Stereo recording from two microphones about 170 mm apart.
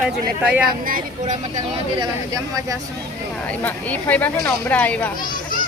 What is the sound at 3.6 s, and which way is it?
Speech, 10° left (ahead or behind).